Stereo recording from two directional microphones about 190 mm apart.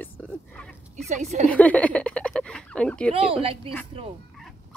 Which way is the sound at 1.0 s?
35° right (ahead or behind).